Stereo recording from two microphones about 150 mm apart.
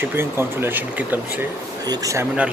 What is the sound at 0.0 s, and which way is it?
Speech, 15° right (ahead or behind).